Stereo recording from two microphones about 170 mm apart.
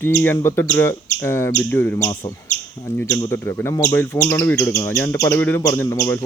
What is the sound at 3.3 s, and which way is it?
Speech, 15° left (ahead or behind).